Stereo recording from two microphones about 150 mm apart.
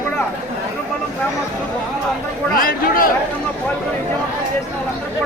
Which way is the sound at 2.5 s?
70° left (ahead or behind).